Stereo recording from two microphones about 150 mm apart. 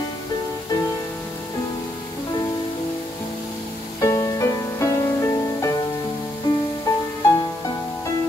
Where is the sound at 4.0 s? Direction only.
20° left (ahead or behind).